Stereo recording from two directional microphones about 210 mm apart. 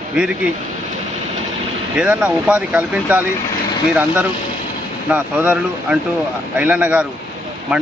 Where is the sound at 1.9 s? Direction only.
5° right (ahead or behind).